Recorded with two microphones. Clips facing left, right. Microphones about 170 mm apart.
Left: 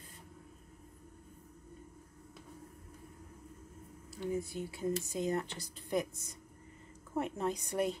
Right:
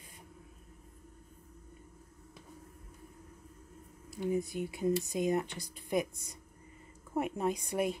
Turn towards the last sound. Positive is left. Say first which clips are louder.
# right 2 dB
turn(degrees=-10)  # may be behind; listen again after turning